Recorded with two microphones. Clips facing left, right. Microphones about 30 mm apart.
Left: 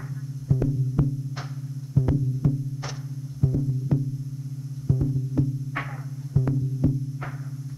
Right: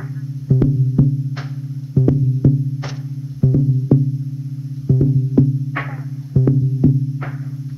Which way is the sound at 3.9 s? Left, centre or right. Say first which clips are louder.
Right 11 dB; centre.